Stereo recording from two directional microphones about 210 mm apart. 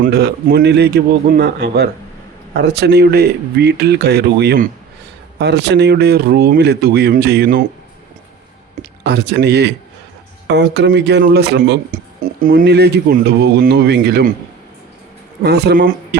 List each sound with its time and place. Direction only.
0.0 s speech: 50° right (ahead or behind)
9.0 s speech: 55° right (ahead or behind)
15.4 s speech: 50° right (ahead or behind)